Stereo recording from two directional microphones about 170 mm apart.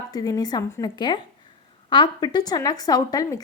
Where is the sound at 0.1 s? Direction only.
20° left (ahead or behind).